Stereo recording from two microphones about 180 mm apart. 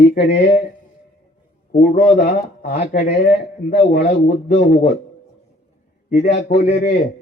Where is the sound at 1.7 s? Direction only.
55° left (ahead or behind).